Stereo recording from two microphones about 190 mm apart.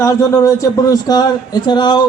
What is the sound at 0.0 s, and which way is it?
A man's voice, 15° left (ahead or behind).